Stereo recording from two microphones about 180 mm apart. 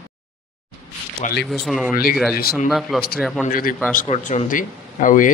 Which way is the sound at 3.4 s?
50° left (ahead or behind).